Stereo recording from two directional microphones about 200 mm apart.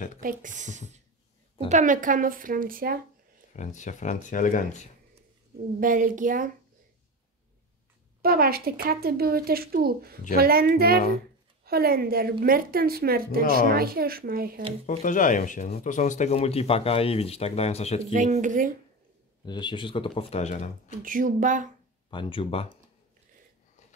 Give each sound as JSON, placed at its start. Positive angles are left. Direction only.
{"t": 0.2, "sound": "speech", "side_deg": -40}
{"t": 3.5, "sound": "speech", "side_deg": 35}
{"t": 5.8, "sound": "speech", "side_deg": -40}
{"t": 8.2, "sound": "speech", "side_deg": -50}
{"t": 14.9, "sound": "speech", "side_deg": 40}
{"t": 18.1, "sound": "speech", "side_deg": -40}
{"t": 19.4, "sound": "speech", "side_deg": 20}
{"t": 21.0, "sound": "speech", "side_deg": -40}
{"t": 22.1, "sound": "speech", "side_deg": 25}